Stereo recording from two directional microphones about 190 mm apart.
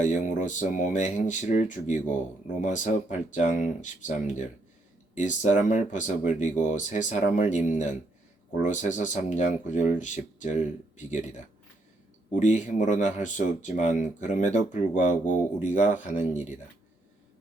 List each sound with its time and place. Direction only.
0.0 s speech: 40° left (ahead or behind)